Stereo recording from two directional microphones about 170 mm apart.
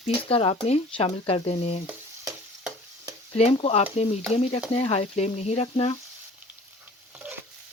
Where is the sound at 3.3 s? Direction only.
35° left (ahead or behind).